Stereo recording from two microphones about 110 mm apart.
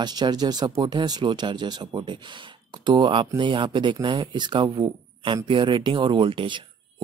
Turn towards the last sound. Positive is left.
turn(degrees=-50)  # may be behind; listen again after turning